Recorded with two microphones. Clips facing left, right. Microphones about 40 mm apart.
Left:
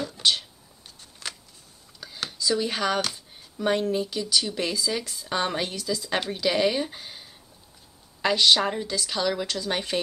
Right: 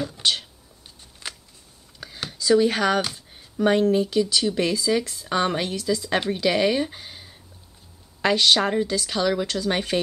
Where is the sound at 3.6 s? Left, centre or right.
Right.